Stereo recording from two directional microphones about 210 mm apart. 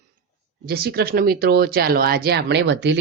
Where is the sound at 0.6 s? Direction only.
45° right (ahead or behind).